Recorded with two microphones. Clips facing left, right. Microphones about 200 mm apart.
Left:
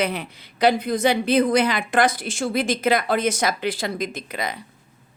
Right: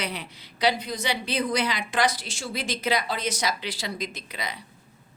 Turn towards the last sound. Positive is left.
turn(degrees=50)  # may be behind; listen again after turning